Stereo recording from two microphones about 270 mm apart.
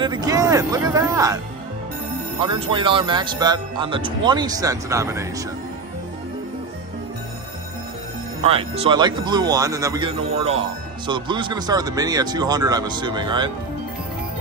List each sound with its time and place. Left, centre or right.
0.0 s speech: centre
2.4 s speech: centre
8.4 s speech: right